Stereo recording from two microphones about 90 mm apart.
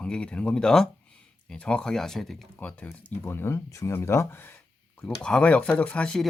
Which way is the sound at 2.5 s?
15° left (ahead or behind).